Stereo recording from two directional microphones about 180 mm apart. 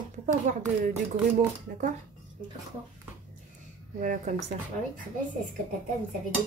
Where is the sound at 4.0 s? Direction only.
50° right (ahead or behind).